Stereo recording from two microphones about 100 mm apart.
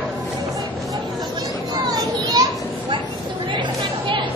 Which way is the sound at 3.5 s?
55° right (ahead or behind).